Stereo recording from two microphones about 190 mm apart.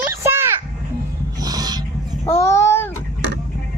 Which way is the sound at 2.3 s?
15° left (ahead or behind).